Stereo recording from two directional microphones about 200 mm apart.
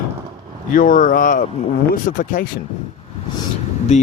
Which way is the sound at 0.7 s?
45° left (ahead or behind).